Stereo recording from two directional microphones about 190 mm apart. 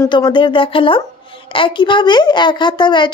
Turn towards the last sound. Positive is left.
turn(degrees=25)  # may be behind; listen again after turning